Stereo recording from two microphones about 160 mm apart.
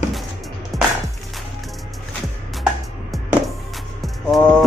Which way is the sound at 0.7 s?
Centre (ahead or behind).